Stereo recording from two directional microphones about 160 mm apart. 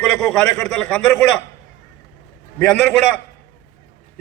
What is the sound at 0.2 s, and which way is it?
A man's voice, 5° left (ahead or behind).